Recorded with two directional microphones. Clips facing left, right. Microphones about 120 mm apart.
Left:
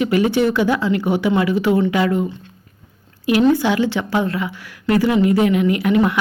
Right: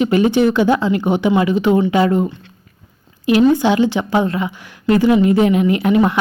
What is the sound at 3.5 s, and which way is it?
A woman's voice, 20° right (ahead or behind).